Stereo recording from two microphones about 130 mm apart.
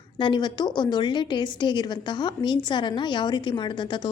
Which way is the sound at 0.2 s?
35° left (ahead or behind).